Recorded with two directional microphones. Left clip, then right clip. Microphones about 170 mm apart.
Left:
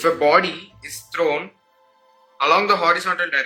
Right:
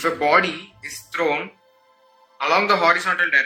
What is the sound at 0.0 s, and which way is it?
Speech, 10° left (ahead or behind).